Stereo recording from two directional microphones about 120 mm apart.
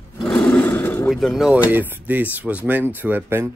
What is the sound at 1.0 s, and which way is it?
Speech, centre (ahead or behind).